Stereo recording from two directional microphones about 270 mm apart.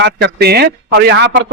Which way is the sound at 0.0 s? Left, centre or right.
Right.